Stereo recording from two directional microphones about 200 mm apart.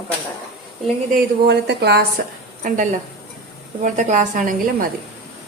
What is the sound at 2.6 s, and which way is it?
Speech, 40° right (ahead or behind).